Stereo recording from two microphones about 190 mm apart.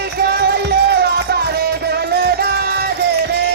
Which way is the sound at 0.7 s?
55° right (ahead or behind).